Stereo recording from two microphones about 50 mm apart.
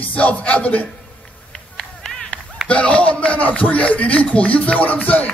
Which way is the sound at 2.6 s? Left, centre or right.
Left.